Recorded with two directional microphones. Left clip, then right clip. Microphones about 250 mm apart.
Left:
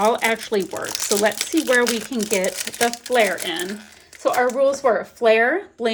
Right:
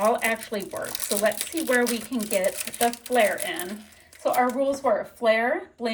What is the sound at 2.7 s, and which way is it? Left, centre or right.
Speech, left.